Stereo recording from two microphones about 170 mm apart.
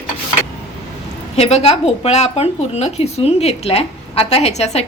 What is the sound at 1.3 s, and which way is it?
Speech, 40° left (ahead or behind).